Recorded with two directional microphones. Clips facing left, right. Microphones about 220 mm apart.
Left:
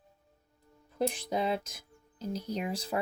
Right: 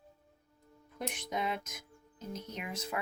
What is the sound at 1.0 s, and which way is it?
Speech, 30° left (ahead or behind).